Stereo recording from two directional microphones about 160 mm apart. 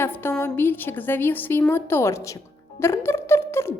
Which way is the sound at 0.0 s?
15° left (ahead or behind).